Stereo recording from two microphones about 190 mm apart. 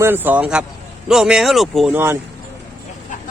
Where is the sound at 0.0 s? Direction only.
10° right (ahead or behind).